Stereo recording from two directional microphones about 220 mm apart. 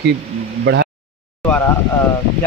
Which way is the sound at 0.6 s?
50° right (ahead or behind).